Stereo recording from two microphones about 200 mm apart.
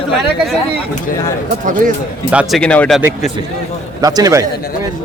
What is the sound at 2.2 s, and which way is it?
Speech, 5° right (ahead or behind).